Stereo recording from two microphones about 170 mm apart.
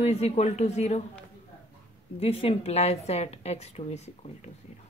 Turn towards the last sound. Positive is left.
turn(degrees=40)  # may be behind; listen again after turning